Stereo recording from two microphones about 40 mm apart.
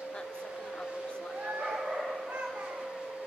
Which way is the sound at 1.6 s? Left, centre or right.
Centre.